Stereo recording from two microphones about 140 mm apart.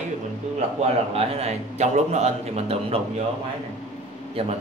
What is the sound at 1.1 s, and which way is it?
A man's voice, 45° right (ahead or behind).